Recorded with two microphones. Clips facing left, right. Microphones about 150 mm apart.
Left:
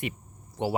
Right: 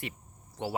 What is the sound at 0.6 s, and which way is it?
Speech, 20° left (ahead or behind).